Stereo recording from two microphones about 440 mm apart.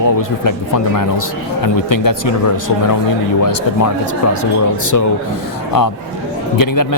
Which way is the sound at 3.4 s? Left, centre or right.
Left.